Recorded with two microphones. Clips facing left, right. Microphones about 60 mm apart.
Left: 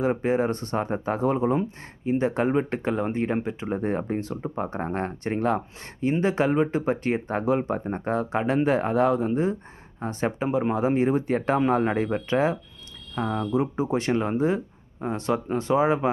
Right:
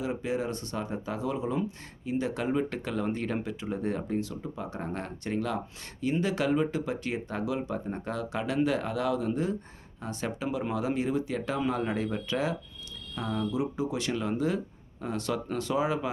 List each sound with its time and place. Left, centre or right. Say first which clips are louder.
0.0 s speech: left 8 dB; left